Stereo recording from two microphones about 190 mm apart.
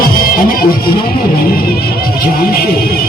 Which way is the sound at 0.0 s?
50° left (ahead or behind).